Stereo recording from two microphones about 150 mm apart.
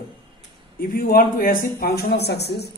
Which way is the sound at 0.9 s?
70° left (ahead or behind).